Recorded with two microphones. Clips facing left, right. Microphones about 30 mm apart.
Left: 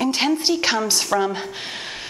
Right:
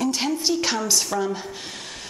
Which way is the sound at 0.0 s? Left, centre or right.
Left.